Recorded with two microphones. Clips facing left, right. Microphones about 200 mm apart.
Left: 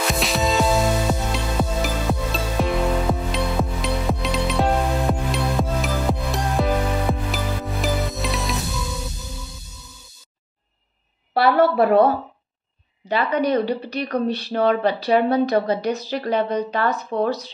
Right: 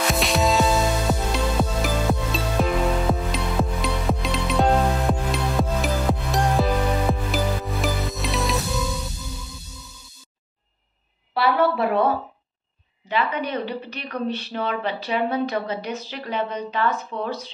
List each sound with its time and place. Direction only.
0.1 s music: centre (ahead or behind)
11.3 s a sound: 40° left (ahead or behind)
13.1 s a woman's voice: 40° left (ahead or behind)